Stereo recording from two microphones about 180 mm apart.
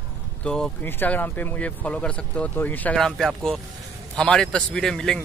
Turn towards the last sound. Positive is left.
turn(degrees=5)  # may be behind; listen again after turning